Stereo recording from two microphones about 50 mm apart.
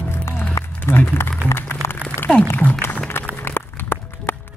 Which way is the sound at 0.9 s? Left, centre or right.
Left.